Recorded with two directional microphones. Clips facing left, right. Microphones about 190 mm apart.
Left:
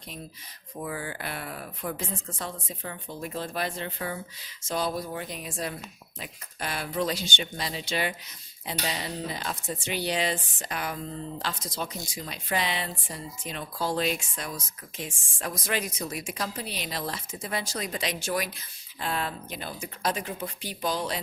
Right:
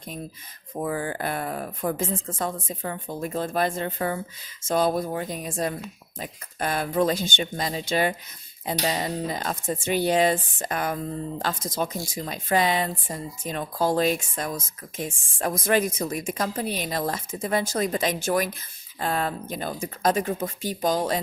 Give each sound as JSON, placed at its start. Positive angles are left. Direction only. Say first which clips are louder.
{"t": 0.7, "sound": "speech", "louder": "right 7 dB", "side_deg": -50}